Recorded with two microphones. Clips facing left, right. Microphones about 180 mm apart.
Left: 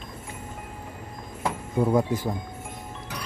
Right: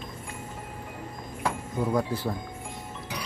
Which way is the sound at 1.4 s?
25° left (ahead or behind).